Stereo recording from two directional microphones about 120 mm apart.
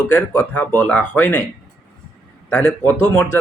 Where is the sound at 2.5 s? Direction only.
10° left (ahead or behind).